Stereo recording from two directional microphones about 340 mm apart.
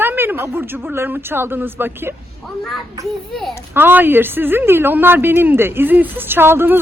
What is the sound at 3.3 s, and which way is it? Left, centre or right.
Speech, centre.